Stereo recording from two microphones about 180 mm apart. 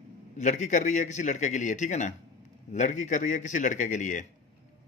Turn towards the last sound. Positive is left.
turn(degrees=45)  # may be behind; listen again after turning